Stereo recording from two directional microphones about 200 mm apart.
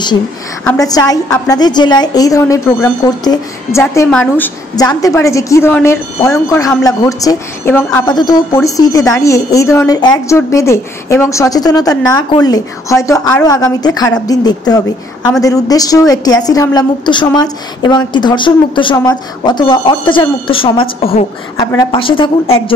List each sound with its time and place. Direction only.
0.7 s a woman's voice: 20° left (ahead or behind)